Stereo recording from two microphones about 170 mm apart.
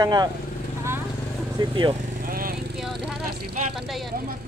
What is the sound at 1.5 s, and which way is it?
Speech, 30° right (ahead or behind).